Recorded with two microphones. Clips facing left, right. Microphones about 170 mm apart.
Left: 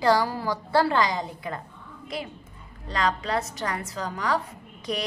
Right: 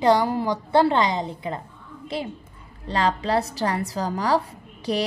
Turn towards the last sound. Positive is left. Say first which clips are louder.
# right 5 dB
turn(degrees=-35)  # may be behind; listen again after turning